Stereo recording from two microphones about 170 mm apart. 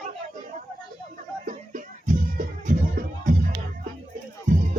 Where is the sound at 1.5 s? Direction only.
50° right (ahead or behind).